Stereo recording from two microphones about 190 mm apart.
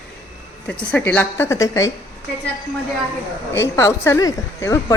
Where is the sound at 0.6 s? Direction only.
5° left (ahead or behind).